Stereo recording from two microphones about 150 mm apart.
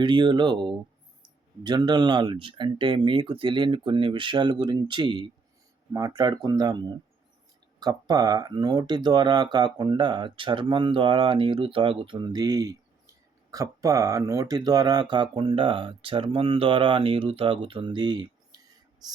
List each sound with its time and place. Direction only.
0.0 s speech: 30° right (ahead or behind)